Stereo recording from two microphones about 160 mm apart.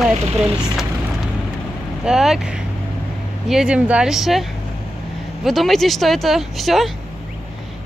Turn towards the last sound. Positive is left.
turn(degrees=0)  # may be behind; listen again after turning